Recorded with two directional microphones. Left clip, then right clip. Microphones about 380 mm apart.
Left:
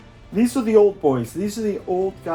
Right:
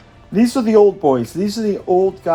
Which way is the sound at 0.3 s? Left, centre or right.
Right.